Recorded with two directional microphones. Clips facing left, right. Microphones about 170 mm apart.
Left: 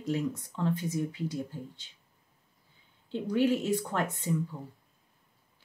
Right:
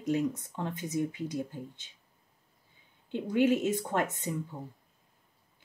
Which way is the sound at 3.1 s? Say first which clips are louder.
Right 1 dB; 20° right (ahead or behind).